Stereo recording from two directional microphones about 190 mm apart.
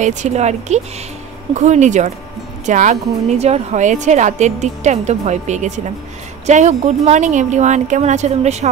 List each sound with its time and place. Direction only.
0.0 s a woman's voice: 40° right (ahead or behind)